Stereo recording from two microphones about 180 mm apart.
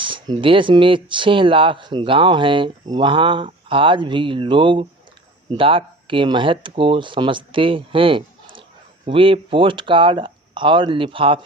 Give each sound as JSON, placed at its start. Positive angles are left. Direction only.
{"t": 0.0, "sound": "speech", "side_deg": -30}